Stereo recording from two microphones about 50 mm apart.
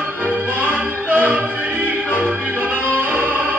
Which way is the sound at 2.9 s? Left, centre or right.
Right.